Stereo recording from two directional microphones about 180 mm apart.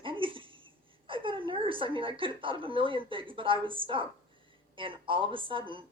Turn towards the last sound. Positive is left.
turn(degrees=-30)  # may be behind; listen again after turning